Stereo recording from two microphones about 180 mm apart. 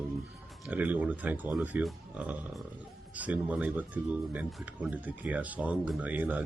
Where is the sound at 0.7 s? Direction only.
10° right (ahead or behind).